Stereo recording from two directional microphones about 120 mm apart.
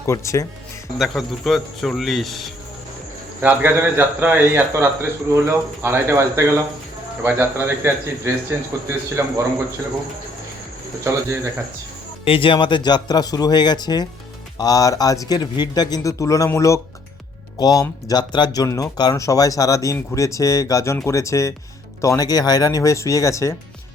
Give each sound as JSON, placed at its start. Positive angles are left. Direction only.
{"t": 0.0, "sound": "speech", "side_deg": 25}
{"t": 0.9, "sound": "speech", "side_deg": 0}
{"t": 3.4, "sound": "a man's voice", "side_deg": -15}
{"t": 12.2, "sound": "speech", "side_deg": 50}